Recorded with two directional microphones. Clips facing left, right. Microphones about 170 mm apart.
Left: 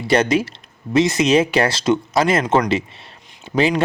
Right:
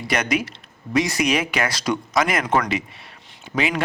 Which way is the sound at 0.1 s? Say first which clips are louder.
Left 7 dB; 30° left (ahead or behind).